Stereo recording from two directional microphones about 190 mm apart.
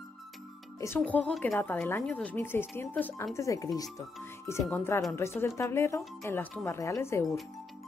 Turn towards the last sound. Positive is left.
turn(degrees=15)  # may be behind; listen again after turning